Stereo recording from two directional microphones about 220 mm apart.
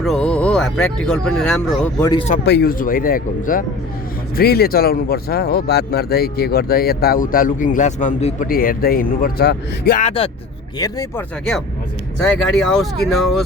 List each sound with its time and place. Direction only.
0.0 s speech: 5° left (ahead or behind)
2.4 s speech: 50° left (ahead or behind)
10.0 s speech: 25° left (ahead or behind)
10.8 s speech: 15° left (ahead or behind)
12.3 s speech: centre (ahead or behind)